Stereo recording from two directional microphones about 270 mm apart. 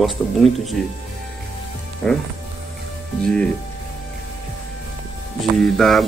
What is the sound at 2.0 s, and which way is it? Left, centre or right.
Speech, centre.